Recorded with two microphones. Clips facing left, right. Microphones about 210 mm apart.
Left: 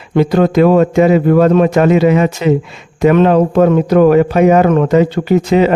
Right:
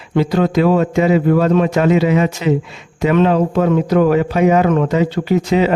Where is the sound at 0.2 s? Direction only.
55° left (ahead or behind).